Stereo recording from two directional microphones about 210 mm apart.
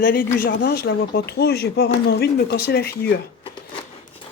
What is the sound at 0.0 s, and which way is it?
Speech, 40° left (ahead or behind).